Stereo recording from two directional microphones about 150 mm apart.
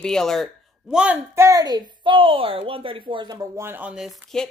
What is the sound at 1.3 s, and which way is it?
A woman's voice, 20° right (ahead or behind).